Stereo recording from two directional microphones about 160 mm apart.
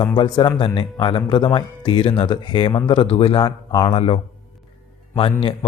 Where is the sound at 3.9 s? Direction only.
40° left (ahead or behind).